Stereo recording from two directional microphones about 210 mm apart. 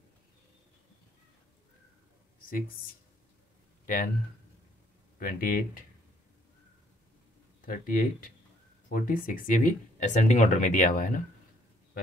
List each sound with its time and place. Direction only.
3.8 s speech: 40° left (ahead or behind)
5.2 s speech: 45° left (ahead or behind)
7.6 s speech: 40° left (ahead or behind)